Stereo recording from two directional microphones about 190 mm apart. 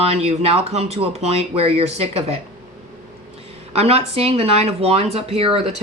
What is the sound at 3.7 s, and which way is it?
Speech, 35° right (ahead or behind).